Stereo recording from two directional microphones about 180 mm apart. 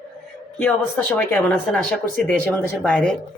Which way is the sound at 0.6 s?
10° left (ahead or behind).